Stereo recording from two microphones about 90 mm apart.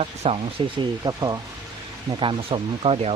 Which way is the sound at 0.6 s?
70° right (ahead or behind).